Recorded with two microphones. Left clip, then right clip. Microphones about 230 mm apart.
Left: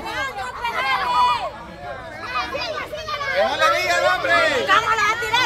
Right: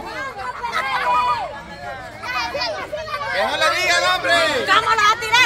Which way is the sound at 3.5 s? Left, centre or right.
Centre.